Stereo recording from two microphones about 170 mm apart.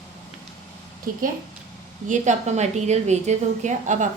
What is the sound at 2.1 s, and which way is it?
A woman's voice, 45° right (ahead or behind).